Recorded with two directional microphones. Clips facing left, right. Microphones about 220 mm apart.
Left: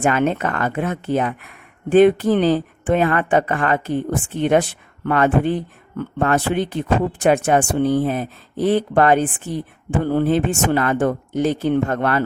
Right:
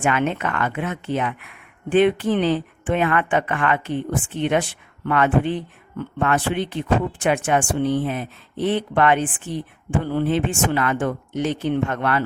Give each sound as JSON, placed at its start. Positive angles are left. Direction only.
{"t": 0.0, "sound": "speech", "side_deg": 40}